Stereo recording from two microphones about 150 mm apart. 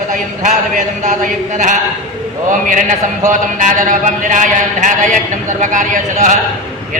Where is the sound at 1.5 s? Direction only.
55° right (ahead or behind).